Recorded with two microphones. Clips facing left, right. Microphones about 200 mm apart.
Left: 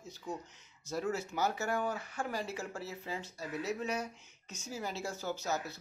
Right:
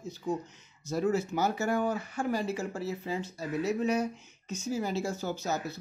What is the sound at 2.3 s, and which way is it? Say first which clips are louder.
Speech: right 10 dB; 25° right (ahead or behind).